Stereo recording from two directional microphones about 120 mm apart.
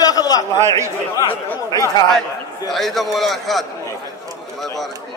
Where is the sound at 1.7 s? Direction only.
30° left (ahead or behind).